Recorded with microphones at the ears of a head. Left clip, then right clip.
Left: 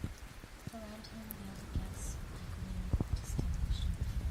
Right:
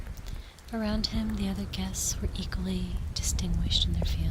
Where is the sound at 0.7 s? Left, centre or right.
Right.